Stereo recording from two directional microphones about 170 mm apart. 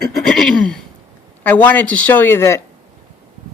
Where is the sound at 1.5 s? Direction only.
10° left (ahead or behind).